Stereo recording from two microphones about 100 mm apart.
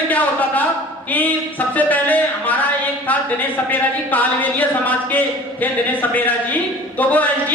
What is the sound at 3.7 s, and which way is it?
A man's voice, 15° left (ahead or behind).